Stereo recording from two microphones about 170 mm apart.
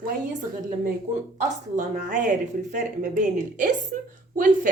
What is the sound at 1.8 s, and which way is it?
A woman's voice, 50° right (ahead or behind).